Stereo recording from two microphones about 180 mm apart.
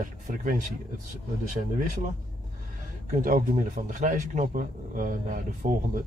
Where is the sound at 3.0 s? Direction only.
45° right (ahead or behind).